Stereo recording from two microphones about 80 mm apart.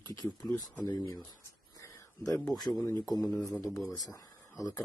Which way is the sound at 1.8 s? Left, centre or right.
Left.